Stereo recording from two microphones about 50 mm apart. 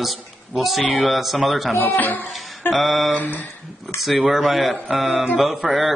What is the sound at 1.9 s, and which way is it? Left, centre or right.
Speech, left.